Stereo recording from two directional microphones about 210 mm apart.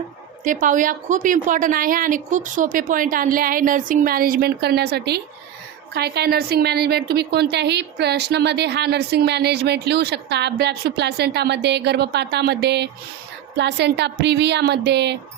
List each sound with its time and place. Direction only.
0.4 s a woman's voice: 40° right (ahead or behind); by 15.2 s 55° right (ahead or behind)